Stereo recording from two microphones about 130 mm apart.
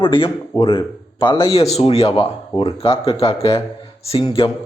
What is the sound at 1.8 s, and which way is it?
Speech, 50° left (ahead or behind).